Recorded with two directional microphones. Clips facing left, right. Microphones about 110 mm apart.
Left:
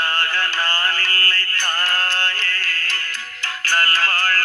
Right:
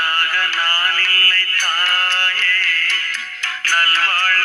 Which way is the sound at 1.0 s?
20° left (ahead or behind).